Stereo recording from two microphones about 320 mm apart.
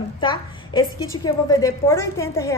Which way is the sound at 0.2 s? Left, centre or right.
Centre.